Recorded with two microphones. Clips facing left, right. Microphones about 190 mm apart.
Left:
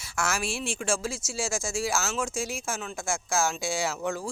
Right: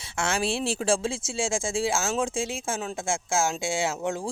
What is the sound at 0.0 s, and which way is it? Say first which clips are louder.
Speech: right 3 dB; 30° right (ahead or behind).